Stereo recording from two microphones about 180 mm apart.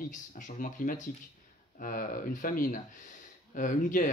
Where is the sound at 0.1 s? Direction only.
45° left (ahead or behind).